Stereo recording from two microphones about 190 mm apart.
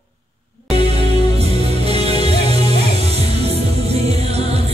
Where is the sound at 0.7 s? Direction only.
30° right (ahead or behind).